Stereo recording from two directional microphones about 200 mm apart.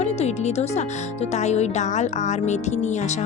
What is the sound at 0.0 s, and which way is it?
Speech, 35° left (ahead or behind).